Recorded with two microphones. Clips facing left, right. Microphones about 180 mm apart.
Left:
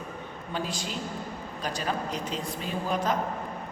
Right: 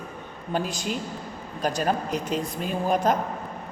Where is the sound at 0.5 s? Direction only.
45° right (ahead or behind).